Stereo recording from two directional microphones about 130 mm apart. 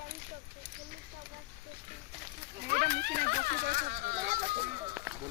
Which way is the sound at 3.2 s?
90° right.